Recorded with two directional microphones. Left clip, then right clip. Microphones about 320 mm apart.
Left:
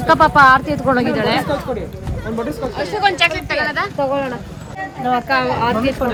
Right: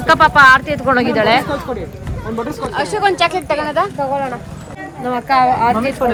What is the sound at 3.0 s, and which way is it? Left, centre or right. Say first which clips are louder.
Speech: even; centre.